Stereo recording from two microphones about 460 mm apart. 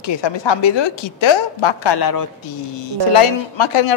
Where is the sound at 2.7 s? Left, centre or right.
Left.